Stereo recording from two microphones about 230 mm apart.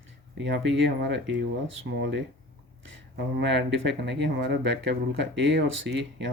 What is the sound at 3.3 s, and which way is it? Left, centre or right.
Speech, right.